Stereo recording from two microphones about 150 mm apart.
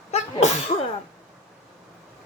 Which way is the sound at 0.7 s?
45° left (ahead or behind).